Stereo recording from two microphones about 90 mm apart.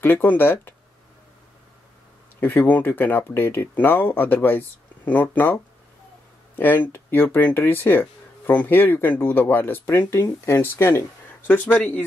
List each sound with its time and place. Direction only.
0.0 s speech: 20° left (ahead or behind)
2.4 s speech: 20° left (ahead or behind)